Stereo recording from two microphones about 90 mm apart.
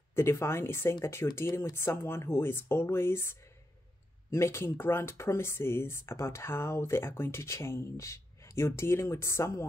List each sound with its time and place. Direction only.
0.1 s speech: 30° left (ahead or behind)